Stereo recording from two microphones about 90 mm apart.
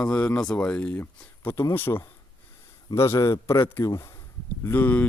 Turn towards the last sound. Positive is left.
turn(degrees=20)  # may be behind; listen again after turning